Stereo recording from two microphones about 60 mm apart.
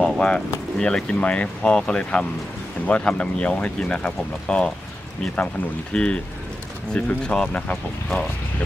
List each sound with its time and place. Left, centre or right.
0.0 s a sound: centre
0.7 s speech: centre
5.9 s speech: centre